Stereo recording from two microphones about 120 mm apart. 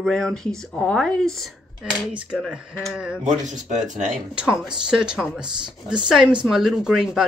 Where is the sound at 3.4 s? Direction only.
85° right.